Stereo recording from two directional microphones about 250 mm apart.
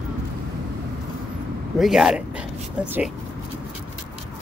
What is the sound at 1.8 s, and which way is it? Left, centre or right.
Speech, centre.